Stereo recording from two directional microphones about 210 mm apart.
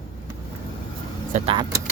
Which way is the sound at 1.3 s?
25° right (ahead or behind).